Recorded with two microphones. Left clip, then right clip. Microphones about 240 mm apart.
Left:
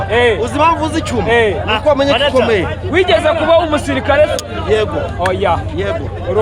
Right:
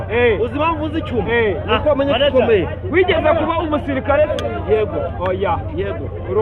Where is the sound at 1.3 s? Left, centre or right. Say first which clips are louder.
Left 5 dB; centre.